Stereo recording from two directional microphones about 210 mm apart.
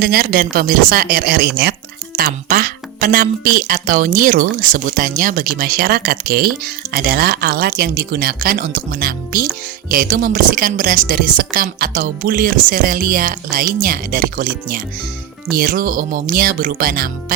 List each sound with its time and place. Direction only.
0.0 s speech: 45° right (ahead or behind)